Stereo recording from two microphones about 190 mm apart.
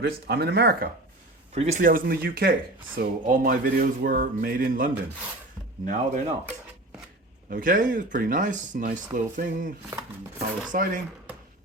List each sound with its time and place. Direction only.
0.0 s speech: 60° right (ahead or behind)
1.5 s speech: 40° right (ahead or behind)
7.5 s speech: 45° right (ahead or behind)